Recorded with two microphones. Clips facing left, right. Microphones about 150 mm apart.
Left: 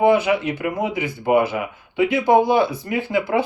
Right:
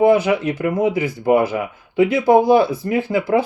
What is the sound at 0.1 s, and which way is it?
Speech, 40° right (ahead or behind).